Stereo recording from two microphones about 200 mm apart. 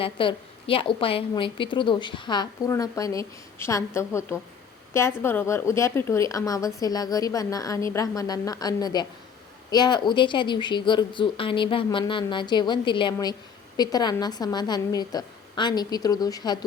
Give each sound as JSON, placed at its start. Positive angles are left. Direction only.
{"t": 0.0, "sound": "a woman's voice", "side_deg": 25}